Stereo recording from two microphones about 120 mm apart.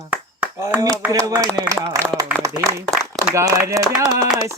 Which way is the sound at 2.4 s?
30° right (ahead or behind).